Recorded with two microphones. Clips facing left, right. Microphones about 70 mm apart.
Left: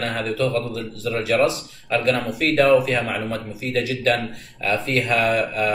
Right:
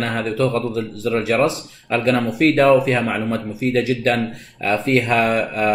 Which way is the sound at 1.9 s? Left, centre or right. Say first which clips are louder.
Right 3 dB; right.